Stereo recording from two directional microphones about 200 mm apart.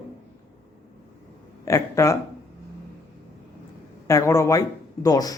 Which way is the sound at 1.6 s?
15° left (ahead or behind).